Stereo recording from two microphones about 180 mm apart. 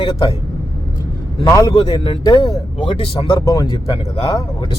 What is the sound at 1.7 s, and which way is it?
Speech, 30° left (ahead or behind).